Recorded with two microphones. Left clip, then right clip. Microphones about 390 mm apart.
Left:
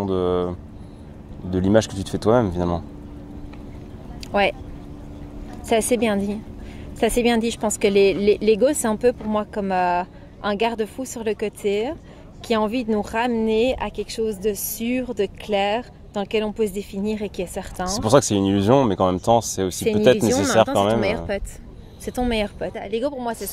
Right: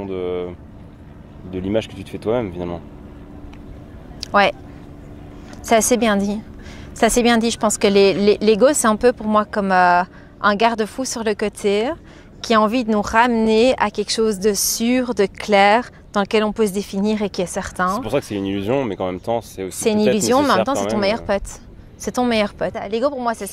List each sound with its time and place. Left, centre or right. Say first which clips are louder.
0.0 s speech: left 3 dB; left
4.2 s speech: right 5 dB; right
5.7 s speech: right 4 dB; right
18.0 s speech: left 5 dB; left
19.8 s speech: even; right